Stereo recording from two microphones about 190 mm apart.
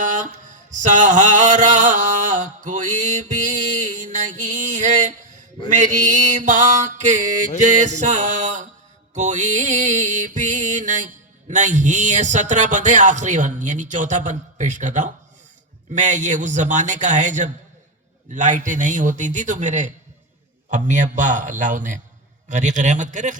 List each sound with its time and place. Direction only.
0.0 s mantra: 40° right (ahead or behind)
5.6 s music: 40° right (ahead or behind)